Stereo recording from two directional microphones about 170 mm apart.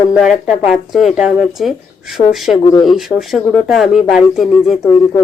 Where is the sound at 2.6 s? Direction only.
20° left (ahead or behind).